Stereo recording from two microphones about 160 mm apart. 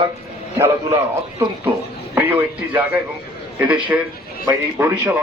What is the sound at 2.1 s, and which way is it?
Speech, 10° right (ahead or behind).